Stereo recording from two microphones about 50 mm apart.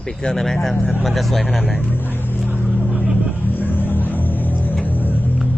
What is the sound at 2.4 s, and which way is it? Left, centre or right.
Vehicle, right.